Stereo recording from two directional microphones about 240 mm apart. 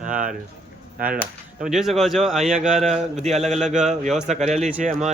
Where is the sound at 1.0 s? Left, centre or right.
Right.